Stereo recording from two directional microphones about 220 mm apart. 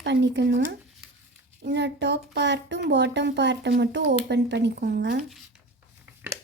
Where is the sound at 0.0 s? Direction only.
50° right (ahead or behind).